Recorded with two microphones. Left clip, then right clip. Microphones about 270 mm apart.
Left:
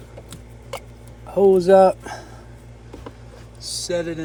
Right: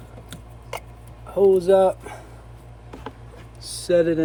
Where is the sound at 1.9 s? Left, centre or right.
Left.